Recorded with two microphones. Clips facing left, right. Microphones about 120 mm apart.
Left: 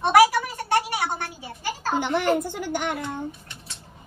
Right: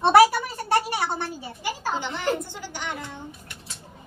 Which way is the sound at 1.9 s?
55° left (ahead or behind).